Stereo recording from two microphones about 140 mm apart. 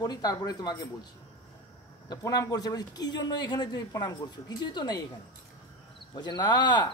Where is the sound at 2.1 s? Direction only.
25° left (ahead or behind).